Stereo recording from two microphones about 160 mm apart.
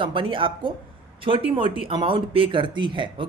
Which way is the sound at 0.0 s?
30° right (ahead or behind).